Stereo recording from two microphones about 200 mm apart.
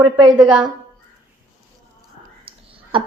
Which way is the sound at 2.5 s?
30° right (ahead or behind).